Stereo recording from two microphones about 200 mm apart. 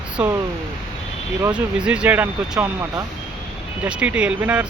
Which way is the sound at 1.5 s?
5° right (ahead or behind).